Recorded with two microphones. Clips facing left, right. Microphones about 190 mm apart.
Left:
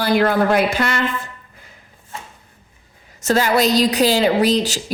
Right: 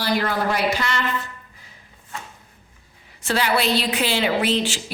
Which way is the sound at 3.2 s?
45° left (ahead or behind).